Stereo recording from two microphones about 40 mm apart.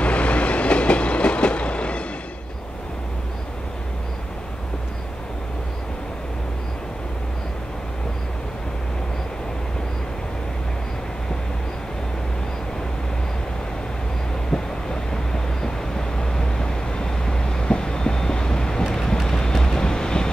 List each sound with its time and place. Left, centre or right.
0.0 s train: left
14.5 s vehicle: centre